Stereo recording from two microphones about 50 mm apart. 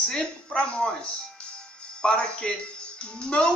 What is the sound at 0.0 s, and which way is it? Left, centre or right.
Speech, centre.